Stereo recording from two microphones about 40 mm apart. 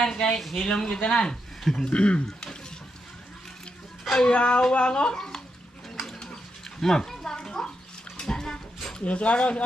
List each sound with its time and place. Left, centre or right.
0.0 s speech: centre
0.4 s speech: centre
0.7 s speech: centre
1.9 s speech: left
4.3 s a child's voice: left
6.8 s a sound: centre
8.2 s music: centre
9.0 s speech: left